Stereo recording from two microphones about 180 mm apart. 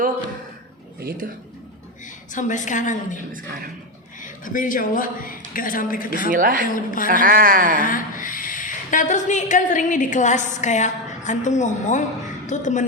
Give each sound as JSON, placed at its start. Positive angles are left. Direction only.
{"t": 0.9, "sound": "speech", "side_deg": -55}
{"t": 2.3, "sound": "speech", "side_deg": 45}
{"t": 3.3, "sound": "speech", "side_deg": -50}
{"t": 4.2, "sound": "a man's voice", "side_deg": 50}
{"t": 6.3, "sound": "speech", "side_deg": -50}
{"t": 6.7, "sound": "speech", "side_deg": 50}
{"t": 7.1, "sound": "speech", "side_deg": -50}
{"t": 7.8, "sound": "a woman's voice", "side_deg": 50}